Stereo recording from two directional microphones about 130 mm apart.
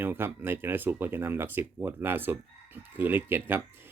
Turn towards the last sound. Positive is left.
turn(degrees=-15)  # may be behind; listen again after turning